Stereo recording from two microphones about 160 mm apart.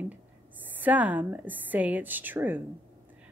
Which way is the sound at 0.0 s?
10° right (ahead or behind).